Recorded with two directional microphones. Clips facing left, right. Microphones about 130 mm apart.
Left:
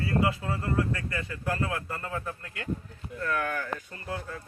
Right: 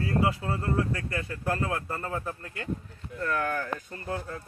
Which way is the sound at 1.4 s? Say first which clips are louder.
Right 1 dB; 35° right (ahead or behind).